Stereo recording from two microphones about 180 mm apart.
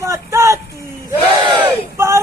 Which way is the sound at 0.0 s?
15° right (ahead or behind).